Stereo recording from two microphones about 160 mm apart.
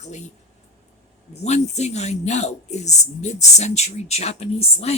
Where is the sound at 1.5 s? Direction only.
45° left (ahead or behind).